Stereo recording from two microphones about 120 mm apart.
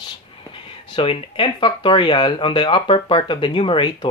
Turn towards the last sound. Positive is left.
turn(degrees=45)  # may be behind; listen again after turning